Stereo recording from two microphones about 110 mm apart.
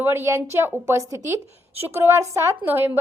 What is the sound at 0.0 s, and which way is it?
A woman's voice, 20° right (ahead or behind).